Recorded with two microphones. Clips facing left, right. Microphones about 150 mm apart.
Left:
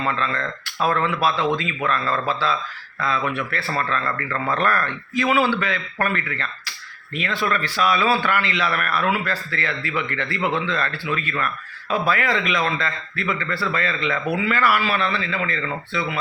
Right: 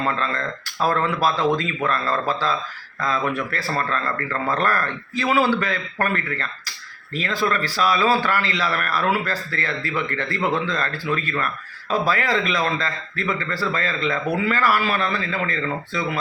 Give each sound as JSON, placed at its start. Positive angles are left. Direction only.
{"t": 0.0, "sound": "speech", "side_deg": -40}